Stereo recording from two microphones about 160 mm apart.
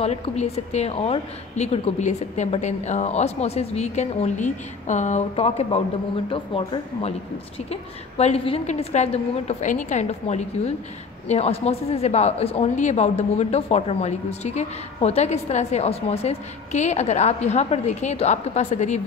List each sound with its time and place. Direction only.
0.0 s speech: 40° left (ahead or behind)